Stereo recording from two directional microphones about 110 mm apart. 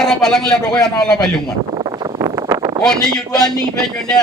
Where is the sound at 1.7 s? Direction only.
45° right (ahead or behind).